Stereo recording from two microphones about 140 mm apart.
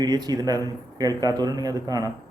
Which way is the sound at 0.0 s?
25° right (ahead or behind).